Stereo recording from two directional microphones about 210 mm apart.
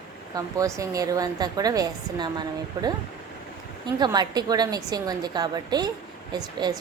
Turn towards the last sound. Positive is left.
turn(degrees=-20)  # may be behind; listen again after turning